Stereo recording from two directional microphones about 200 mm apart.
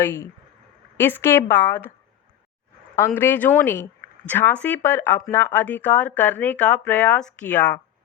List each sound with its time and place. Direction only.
0.0 s speech: 10° left (ahead or behind)
3.1 s speech: 10° left (ahead or behind)